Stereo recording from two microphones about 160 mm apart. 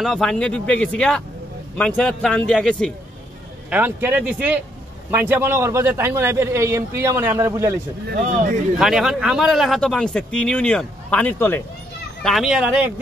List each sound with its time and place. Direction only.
0.0 s speech: centre (ahead or behind)
3.7 s a man's voice: 10° right (ahead or behind)
8.2 s a man's voice: 50° right (ahead or behind)
8.7 s speech: centre (ahead or behind)
12.2 s speech: centre (ahead or behind)